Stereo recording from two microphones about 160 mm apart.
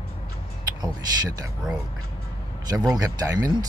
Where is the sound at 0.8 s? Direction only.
20° right (ahead or behind).